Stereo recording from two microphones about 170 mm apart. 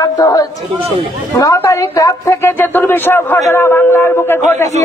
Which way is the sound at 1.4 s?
20° left (ahead or behind).